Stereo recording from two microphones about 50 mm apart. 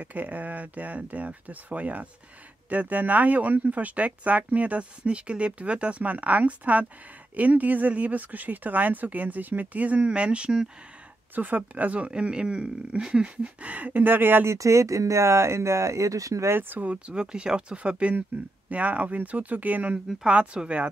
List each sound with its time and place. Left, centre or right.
0.0 s speech: right; by 10.7 s centre
11.3 s speech: right
14.4 s speech: right
16.5 s speech: right
16.9 s speech: centre